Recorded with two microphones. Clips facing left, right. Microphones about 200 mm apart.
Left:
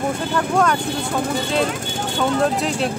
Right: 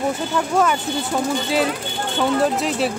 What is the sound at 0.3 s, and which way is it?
Speech, 5° right (ahead or behind).